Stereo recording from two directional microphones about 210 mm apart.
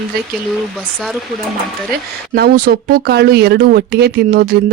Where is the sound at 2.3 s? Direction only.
45° right (ahead or behind).